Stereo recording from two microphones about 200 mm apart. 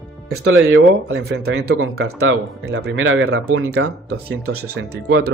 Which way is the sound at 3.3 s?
80° right.